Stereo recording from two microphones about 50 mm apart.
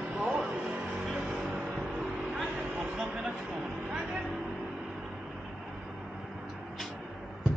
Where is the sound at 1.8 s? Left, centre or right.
Centre.